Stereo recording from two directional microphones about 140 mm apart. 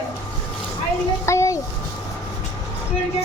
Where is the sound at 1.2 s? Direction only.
20° left (ahead or behind).